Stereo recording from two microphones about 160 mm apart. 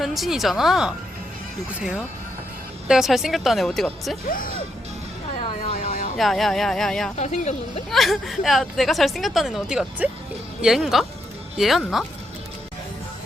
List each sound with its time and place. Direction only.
0.0 s a woman's voice: centre (ahead or behind)
2.8 s a woman's voice: 5° right (ahead or behind)
4.3 s speech: 60° left (ahead or behind)
5.7 s emergency vehicle: 55° left (ahead or behind)
6.1 s a woman's voice: centre (ahead or behind)
7.2 s a woman's voice: 45° left (ahead or behind)
7.9 s a woman's voice: centre (ahead or behind)